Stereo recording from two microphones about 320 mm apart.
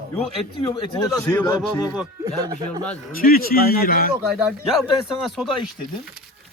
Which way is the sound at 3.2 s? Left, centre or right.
Left.